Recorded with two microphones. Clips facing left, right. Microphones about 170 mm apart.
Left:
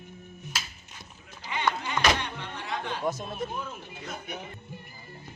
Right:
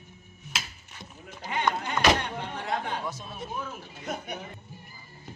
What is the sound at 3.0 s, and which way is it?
Speech, 50° left (ahead or behind).